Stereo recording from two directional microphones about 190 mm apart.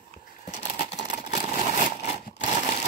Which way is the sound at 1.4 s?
40° left (ahead or behind).